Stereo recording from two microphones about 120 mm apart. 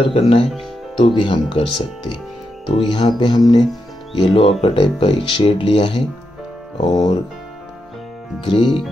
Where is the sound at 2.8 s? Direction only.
40° left (ahead or behind).